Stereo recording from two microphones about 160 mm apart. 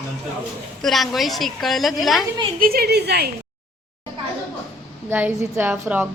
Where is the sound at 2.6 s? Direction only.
70° right (ahead or behind); by 3.3 s 90° right.